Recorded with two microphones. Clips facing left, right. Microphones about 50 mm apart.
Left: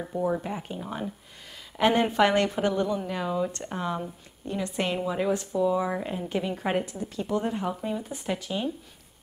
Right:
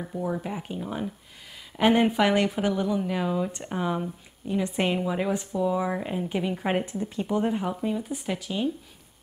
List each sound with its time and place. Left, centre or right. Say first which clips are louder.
0.0 s a woman's voice: left 2 dB; centre
6.9 s speech: right 3 dB; right
7.2 s speech: right 1 dB; centre